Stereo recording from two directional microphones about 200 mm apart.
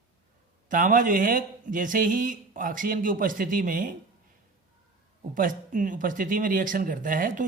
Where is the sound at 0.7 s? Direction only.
40° right (ahead or behind).